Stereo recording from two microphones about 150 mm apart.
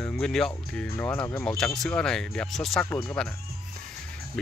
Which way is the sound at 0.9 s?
15° left (ahead or behind).